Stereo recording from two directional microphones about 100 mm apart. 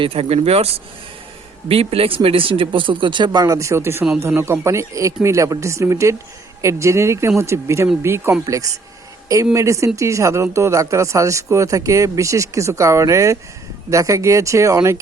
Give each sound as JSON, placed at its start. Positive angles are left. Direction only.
{"t": 0.0, "sound": "speech", "side_deg": -75}
{"t": 1.6, "sound": "speech", "side_deg": -70}
{"t": 3.4, "sound": "speech", "side_deg": -35}